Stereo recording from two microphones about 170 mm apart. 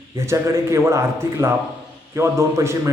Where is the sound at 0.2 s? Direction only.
15° right (ahead or behind).